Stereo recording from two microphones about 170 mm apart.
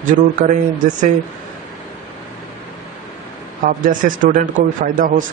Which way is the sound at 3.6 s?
50° right (ahead or behind).